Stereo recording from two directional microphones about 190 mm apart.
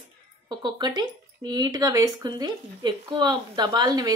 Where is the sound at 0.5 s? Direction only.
25° right (ahead or behind).